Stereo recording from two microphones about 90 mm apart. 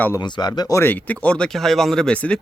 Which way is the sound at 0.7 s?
30° left (ahead or behind).